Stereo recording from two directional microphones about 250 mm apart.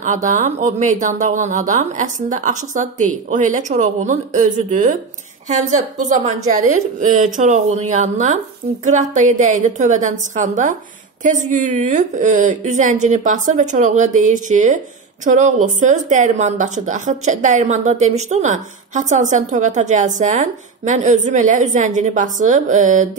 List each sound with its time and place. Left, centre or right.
0.0 s a woman's voice: right